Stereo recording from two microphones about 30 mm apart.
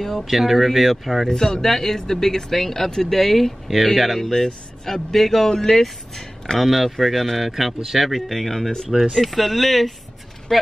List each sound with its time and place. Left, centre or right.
0.0 s speech: centre
0.3 s speech: centre
1.3 s speech: left
1.6 s speech: centre
6.6 s speech: centre
7.4 s speech: centre
8.3 s speech: centre
10.5 s speech: centre